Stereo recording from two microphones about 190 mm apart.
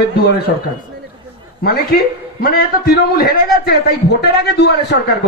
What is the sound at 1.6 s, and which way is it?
A man's voice, 55° left (ahead or behind).